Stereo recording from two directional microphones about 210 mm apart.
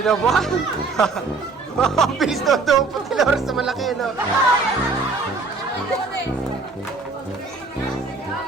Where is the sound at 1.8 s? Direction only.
Centre (ahead or behind).